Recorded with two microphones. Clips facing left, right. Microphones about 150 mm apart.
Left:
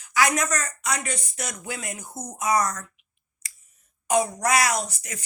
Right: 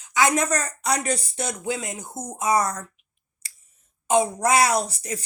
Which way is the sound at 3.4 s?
30° right (ahead or behind).